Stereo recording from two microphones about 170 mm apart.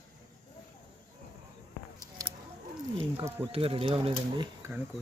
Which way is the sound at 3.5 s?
35° right (ahead or behind).